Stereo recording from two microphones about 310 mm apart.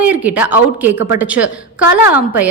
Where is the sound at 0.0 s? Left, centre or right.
Centre.